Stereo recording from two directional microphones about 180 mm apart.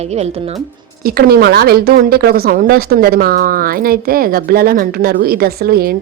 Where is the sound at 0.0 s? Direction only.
35° right (ahead or behind).